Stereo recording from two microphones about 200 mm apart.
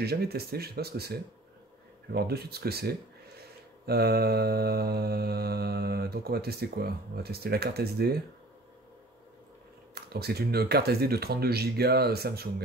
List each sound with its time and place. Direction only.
0.0 s mantra: 50° right (ahead or behind)
9.9 s mantra: 50° right (ahead or behind)